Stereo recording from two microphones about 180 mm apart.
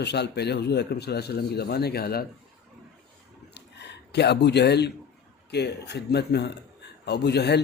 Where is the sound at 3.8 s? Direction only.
70° left (ahead or behind).